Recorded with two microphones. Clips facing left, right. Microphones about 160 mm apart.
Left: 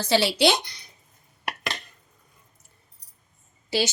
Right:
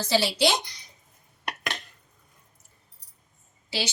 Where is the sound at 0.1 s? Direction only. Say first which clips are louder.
Left 3 dB; 65° left (ahead or behind).